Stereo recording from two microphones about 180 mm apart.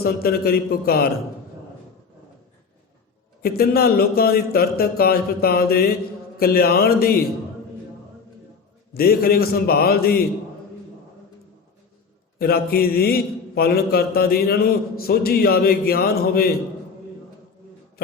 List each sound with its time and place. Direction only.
0.0 s a man's voice: 55° left (ahead or behind)
3.4 s a man's voice: 60° left (ahead or behind)
8.9 s a man's voice: 60° left (ahead or behind)
12.4 s a man's voice: 60° left (ahead or behind)